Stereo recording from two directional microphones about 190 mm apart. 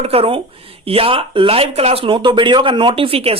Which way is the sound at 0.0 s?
30° right (ahead or behind).